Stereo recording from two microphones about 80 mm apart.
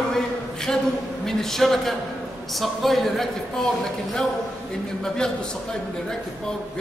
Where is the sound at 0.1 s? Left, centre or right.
Centre.